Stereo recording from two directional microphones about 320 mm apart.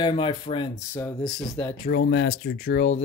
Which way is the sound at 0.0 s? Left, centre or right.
Centre.